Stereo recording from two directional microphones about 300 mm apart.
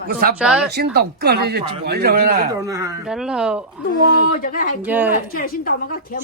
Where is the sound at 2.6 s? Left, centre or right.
Centre.